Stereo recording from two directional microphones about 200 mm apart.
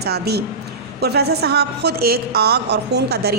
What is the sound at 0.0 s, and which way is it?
A woman's voice, 55° right (ahead or behind).